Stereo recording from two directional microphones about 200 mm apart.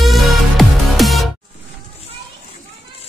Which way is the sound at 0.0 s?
Centre (ahead or behind).